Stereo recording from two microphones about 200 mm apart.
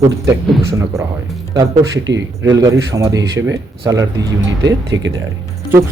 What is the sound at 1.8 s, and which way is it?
Speech, 65° right (ahead or behind).